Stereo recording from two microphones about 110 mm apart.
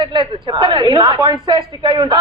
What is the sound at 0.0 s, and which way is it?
A woman's voice, 45° right (ahead or behind).